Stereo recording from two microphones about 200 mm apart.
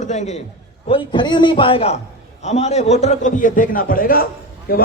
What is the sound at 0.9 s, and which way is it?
A man's voice, 25° left (ahead or behind).